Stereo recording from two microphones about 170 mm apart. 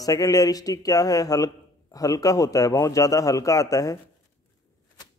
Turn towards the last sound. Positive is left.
turn(degrees=20)  # may be behind; listen again after turning